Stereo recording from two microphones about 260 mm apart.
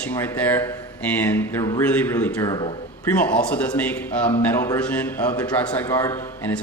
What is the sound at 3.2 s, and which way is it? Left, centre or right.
A man's voice, centre.